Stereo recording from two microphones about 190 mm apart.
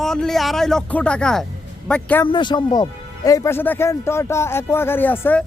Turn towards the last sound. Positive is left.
turn(degrees=10)  # may be behind; listen again after turning